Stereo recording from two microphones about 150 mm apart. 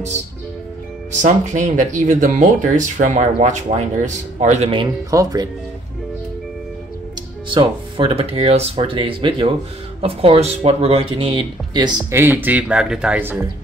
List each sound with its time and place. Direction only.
1.1 s speech: 55° right (ahead or behind)
4.6 s speech: 35° right (ahead or behind)
5.1 s speech: 25° right (ahead or behind)
7.4 s speech: 35° right (ahead or behind)
12.1 s speech: 15° right (ahead or behind)